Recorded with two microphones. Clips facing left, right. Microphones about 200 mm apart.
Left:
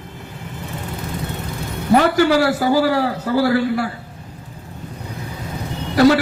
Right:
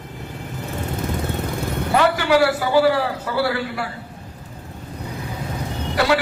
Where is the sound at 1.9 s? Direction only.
40° left (ahead or behind).